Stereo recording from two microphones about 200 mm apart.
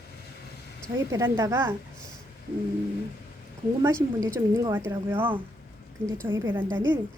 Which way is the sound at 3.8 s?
15° right (ahead or behind).